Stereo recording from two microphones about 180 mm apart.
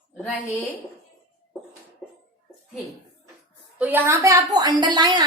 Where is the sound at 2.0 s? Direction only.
Centre (ahead or behind).